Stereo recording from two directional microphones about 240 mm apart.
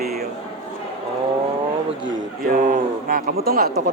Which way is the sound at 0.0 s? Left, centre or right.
Right.